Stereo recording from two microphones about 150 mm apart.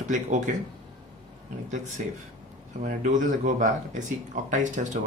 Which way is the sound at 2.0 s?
55° right (ahead or behind).